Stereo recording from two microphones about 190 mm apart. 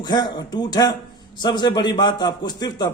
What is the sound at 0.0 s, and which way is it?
A man's voice, 20° left (ahead or behind).